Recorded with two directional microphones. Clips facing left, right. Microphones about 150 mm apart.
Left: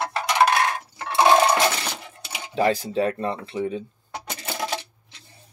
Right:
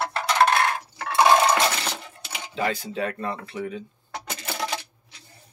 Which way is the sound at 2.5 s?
35° left (ahead or behind).